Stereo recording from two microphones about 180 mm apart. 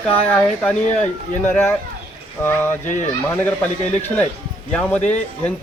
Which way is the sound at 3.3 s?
10° left (ahead or behind).